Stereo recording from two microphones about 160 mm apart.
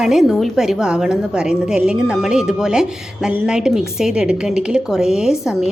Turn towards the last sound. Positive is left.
turn(degrees=-5)  # may be behind; listen again after turning